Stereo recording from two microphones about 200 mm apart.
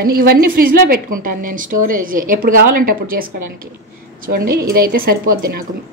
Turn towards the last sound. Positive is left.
turn(degrees=-45)  # may be behind; listen again after turning